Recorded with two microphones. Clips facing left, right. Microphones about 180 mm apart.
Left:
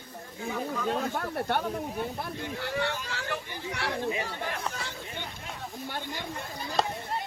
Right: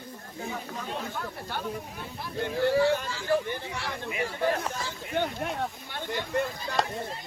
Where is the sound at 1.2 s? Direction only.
65° left (ahead or behind).